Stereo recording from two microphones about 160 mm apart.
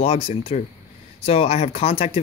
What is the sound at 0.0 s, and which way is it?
Speech, 40° left (ahead or behind).